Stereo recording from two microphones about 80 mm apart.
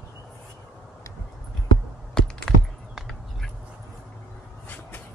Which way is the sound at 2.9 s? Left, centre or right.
Centre.